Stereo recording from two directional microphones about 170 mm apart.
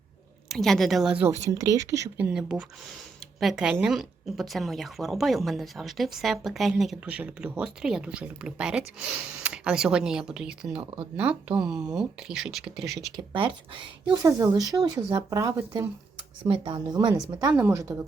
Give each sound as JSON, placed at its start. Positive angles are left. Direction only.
{"t": 0.4, "sound": "a woman's voice", "side_deg": 0}
{"t": 1.3, "sound": "a woman's voice", "side_deg": -20}
{"t": 14.2, "sound": "speech", "side_deg": -20}
{"t": 17.5, "sound": "a woman's voice", "side_deg": -10}